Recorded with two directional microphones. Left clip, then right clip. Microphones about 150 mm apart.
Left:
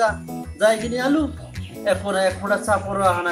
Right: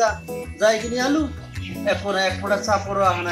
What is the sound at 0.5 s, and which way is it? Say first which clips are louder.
Speech: left 1 dB; centre (ahead or behind).